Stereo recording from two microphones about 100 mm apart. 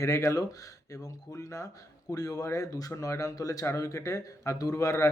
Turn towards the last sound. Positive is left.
turn(degrees=30)  # may be behind; listen again after turning